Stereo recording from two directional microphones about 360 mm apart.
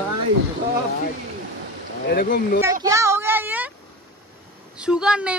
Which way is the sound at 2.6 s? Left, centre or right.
Centre.